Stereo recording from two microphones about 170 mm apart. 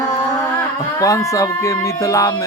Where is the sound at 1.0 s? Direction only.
20° left (ahead or behind).